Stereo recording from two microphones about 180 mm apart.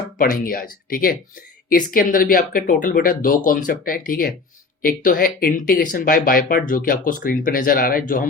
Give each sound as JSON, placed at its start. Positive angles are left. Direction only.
{"t": 0.2, "sound": "speech", "side_deg": 50}